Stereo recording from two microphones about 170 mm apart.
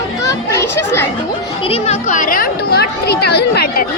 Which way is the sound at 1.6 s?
35° left (ahead or behind).